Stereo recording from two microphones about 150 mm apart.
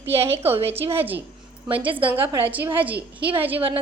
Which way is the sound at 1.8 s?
35° right (ahead or behind).